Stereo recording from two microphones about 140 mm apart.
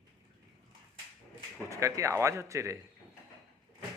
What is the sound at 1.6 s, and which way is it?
Speech, 20° right (ahead or behind).